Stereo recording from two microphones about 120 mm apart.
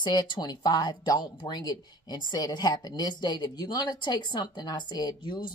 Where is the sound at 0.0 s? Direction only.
35° left (ahead or behind).